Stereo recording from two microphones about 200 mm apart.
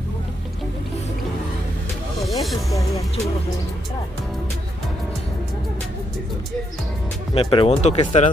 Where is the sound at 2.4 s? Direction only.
Centre (ahead or behind).